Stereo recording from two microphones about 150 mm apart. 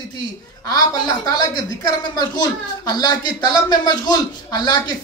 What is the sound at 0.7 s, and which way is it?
Speech, 25° left (ahead or behind).